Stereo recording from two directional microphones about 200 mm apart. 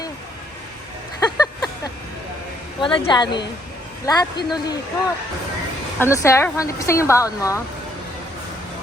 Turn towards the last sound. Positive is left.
turn(degrees=15)  # may be behind; listen again after turning